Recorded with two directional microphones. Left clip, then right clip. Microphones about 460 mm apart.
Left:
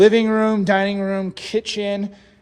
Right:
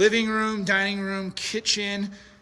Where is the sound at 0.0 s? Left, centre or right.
Centre.